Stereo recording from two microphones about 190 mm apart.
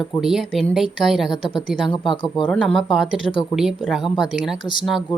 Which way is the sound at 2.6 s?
Centre (ahead or behind).